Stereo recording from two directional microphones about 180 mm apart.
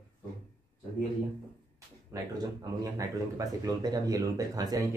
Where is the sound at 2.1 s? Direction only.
15° right (ahead or behind).